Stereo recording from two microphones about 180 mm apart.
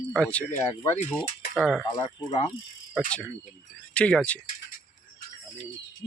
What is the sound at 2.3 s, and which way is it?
Cricket, 40° left (ahead or behind).